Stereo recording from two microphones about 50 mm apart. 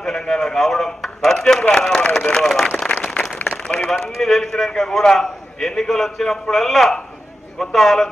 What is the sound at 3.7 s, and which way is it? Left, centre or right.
Speech, left.